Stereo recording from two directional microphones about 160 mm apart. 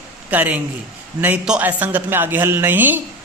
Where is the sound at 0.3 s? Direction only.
10° right (ahead or behind).